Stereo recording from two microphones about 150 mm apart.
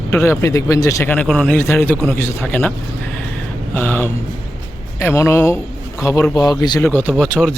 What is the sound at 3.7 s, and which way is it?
A man's voice, 15° left (ahead or behind).